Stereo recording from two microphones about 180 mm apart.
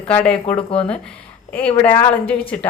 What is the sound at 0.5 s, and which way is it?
Speech, 30° left (ahead or behind).